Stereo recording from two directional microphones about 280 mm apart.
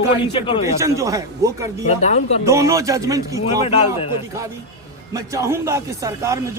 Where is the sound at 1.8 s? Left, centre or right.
Left.